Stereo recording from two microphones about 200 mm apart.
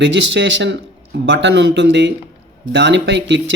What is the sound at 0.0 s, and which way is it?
Speech, 65° right (ahead or behind).